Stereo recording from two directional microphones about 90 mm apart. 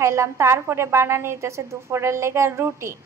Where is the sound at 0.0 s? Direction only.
35° right (ahead or behind).